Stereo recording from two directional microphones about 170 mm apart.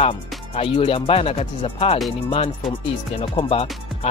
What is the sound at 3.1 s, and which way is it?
Speech, 35° left (ahead or behind).